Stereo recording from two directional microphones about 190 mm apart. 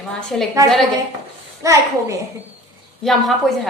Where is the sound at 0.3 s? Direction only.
Centre (ahead or behind).